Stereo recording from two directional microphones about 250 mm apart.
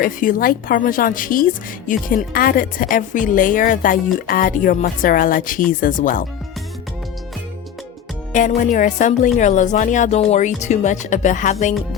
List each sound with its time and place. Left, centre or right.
0.0 s speech: left
8.3 s speech: left